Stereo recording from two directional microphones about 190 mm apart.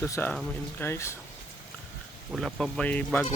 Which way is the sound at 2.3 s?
Centre (ahead or behind).